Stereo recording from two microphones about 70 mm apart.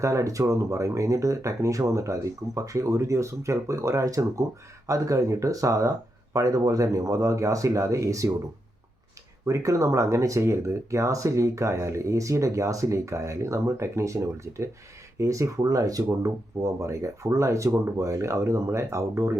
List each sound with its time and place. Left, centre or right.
0.0 s speech: right
9.5 s speech: right